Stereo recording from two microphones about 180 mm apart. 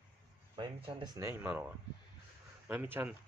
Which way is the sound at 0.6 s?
30° right (ahead or behind).